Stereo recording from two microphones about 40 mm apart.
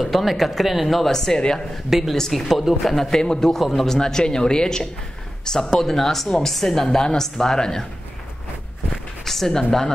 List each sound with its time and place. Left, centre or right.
0.2 s speech: centre
1.9 s speech: centre
2.1 s speech: centre
3.1 s a woman's voice: centre
3.5 s a woman's voice: centre
9.2 s speech: centre